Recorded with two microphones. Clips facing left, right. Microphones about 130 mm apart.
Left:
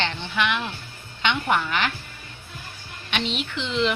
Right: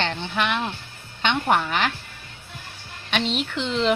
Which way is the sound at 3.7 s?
35° right (ahead or behind).